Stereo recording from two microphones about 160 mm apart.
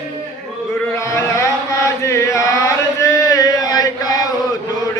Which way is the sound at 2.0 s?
20° left (ahead or behind).